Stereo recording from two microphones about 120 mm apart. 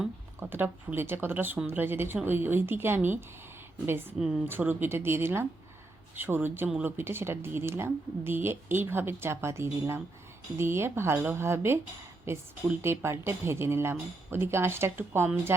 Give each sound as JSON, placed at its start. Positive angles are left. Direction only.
{"t": 0.3, "sound": "speech", "side_deg": -15}
{"t": 4.2, "sound": "a woman's voice", "side_deg": -5}
{"t": 4.4, "sound": "a woman's voice", "side_deg": -15}